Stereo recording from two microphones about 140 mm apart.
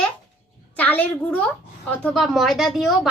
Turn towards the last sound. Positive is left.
turn(degrees=0)  # may be behind; listen again after turning